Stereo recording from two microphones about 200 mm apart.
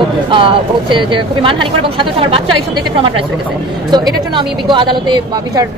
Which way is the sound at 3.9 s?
20° right (ahead or behind).